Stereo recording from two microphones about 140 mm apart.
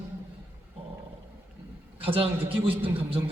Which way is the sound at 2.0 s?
40° right (ahead or behind).